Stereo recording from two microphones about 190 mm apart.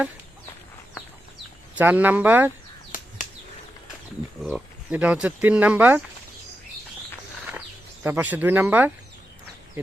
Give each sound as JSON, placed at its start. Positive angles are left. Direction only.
{"t": 1.8, "sound": "speech", "side_deg": -10}
{"t": 2.9, "sound": "a sound", "side_deg": 45}
{"t": 4.4, "sound": "speech", "side_deg": -5}
{"t": 8.0, "sound": "speech", "side_deg": -10}